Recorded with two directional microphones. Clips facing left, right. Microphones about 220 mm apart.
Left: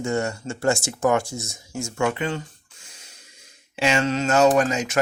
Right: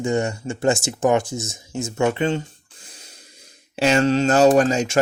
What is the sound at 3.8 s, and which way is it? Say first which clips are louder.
Speech: right 5 dB; 40° right (ahead or behind).